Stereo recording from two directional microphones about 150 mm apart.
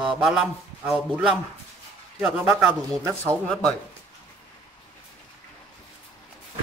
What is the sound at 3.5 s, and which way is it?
Speech, 5° left (ahead or behind).